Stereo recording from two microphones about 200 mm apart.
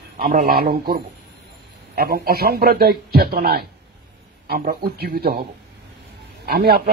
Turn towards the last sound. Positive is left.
turn(degrees=-50)  # may be behind; listen again after turning